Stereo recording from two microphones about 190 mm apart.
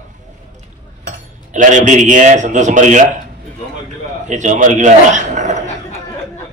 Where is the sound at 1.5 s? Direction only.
40° right (ahead or behind).